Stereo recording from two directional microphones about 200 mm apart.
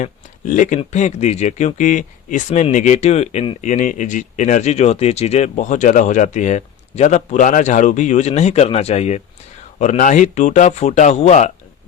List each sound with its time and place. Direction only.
0.0 s speech: 40° left (ahead or behind)